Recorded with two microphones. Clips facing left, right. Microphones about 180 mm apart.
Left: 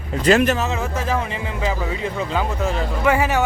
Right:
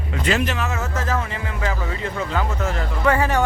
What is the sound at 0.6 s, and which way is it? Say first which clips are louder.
Speech: left 2 dB; 15° left (ahead or behind).